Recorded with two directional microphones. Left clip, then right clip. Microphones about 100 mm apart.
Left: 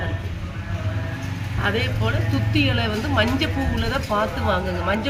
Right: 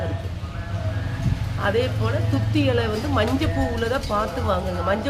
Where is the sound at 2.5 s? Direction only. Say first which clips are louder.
Even; 35° right (ahead or behind).